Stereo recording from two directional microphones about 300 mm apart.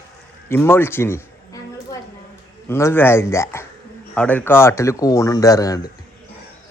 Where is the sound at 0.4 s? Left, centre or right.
Centre.